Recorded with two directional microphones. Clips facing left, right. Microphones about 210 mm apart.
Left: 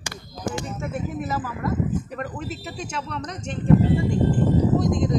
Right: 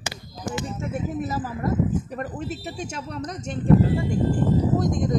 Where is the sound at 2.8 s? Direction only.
45° right (ahead or behind).